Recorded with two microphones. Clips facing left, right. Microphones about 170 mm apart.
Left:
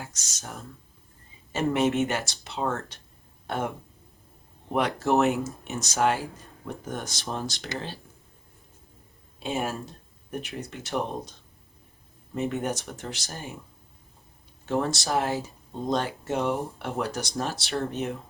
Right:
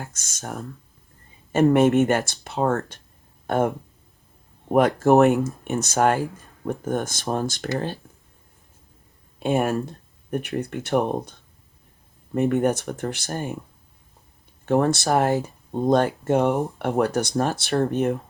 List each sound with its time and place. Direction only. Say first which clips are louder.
0.0 s speech: right 5 dB; 50° right (ahead or behind)
1.7 s speech: right 5 dB; 55° right (ahead or behind)
4.7 s speech: right 7 dB; 45° right (ahead or behind)
9.4 s speech: right 8 dB; 60° right (ahead or behind)
14.7 s speech: right 7 dB; 55° right (ahead or behind)